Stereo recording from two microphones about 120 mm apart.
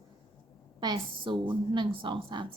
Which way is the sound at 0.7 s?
40° right (ahead or behind).